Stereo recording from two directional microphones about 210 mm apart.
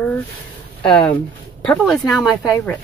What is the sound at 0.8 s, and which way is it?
Speech, 5° left (ahead or behind).